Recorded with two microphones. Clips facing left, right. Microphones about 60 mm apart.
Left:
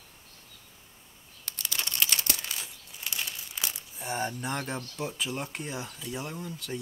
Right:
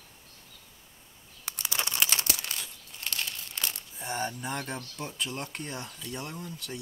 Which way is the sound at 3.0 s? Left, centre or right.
Centre.